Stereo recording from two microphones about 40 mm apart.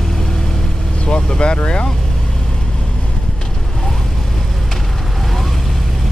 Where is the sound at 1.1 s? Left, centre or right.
Left.